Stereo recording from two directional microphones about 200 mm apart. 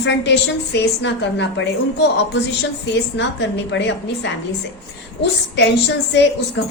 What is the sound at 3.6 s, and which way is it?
Speech, 65° left (ahead or behind).